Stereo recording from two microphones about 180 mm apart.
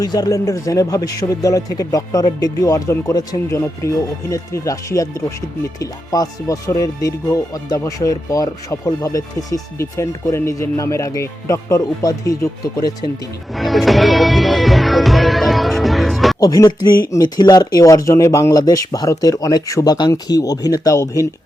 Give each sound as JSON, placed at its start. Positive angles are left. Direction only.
{"t": 0.0, "sound": "speech", "side_deg": 20}
{"t": 13.6, "sound": "music", "side_deg": 0}
{"t": 16.4, "sound": "speech", "side_deg": 20}